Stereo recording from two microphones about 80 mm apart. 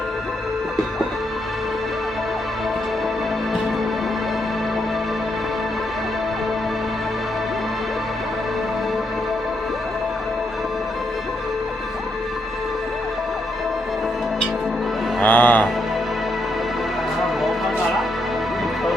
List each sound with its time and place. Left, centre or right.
15.2 s music: left